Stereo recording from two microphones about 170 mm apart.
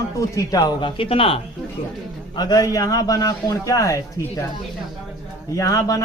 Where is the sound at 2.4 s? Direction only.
20° left (ahead or behind).